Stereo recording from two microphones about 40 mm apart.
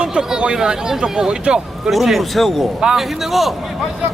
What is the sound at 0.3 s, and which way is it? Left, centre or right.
Speech, centre.